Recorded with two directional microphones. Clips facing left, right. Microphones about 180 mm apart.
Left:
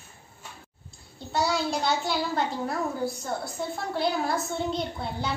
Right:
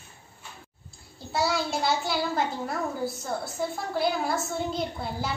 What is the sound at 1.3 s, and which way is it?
A woman's voice, centre (ahead or behind).